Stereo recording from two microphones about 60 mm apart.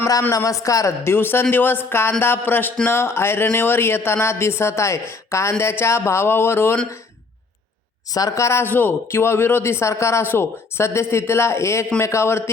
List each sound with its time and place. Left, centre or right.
0.3 s a woman's voice: left
1.0 s speech: left
8.1 s speech: left
8.4 s speech: left